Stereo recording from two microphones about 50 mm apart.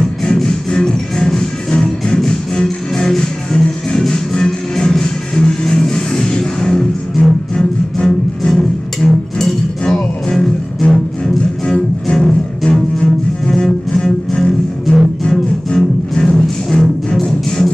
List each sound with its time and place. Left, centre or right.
0.2 s music: centre
11.6 s music: centre
12.2 s double bass: centre
15.2 s music: centre